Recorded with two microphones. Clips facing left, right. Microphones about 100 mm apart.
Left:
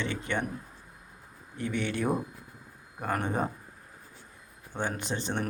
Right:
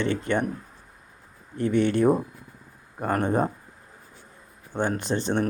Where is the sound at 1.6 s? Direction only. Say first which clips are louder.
Right 9 dB; 35° right (ahead or behind).